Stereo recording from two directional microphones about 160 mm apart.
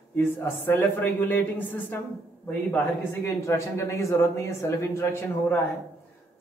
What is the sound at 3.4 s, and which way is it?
Speech, 20° left (ahead or behind).